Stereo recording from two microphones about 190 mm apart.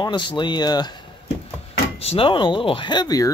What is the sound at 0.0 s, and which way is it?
Speech, 25° left (ahead or behind).